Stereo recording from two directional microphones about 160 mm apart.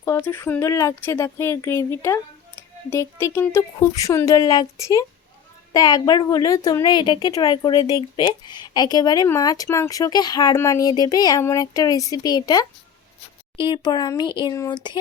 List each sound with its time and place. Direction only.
0.0 s a woman's voice: 15° left (ahead or behind)